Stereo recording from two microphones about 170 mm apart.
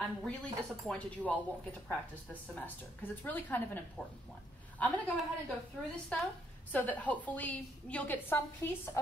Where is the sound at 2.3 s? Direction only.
10° left (ahead or behind).